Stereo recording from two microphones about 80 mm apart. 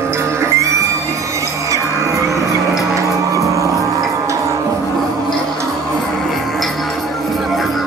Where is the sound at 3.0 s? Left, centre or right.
Right.